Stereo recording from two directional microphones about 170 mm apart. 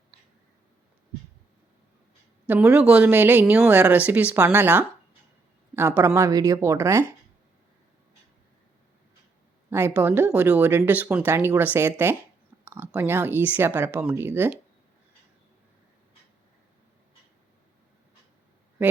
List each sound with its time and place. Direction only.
2.5 s speech: 10° right (ahead or behind)
6.0 s speech: 15° right (ahead or behind)
9.6 s speech: 15° right (ahead or behind)
18.8 s speech: 10° right (ahead or behind)